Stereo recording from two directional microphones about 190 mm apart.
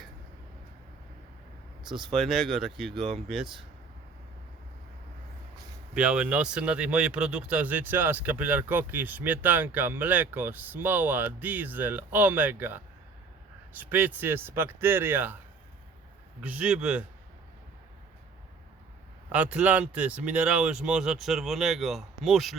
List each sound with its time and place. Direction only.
2.1 s speech: centre (ahead or behind)
5.9 s speech: 5° right (ahead or behind)
16.4 s speech: 5° right (ahead or behind)
19.3 s speech: 5° right (ahead or behind)